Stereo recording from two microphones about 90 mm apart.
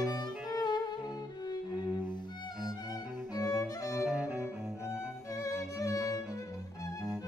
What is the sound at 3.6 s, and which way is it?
Music, 40° left (ahead or behind).